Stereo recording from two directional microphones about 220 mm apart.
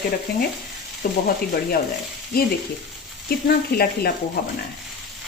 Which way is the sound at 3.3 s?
45° left (ahead or behind).